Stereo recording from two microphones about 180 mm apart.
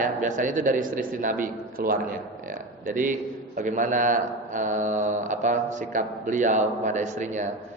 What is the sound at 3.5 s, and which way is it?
A man's voice, 45° right (ahead or behind).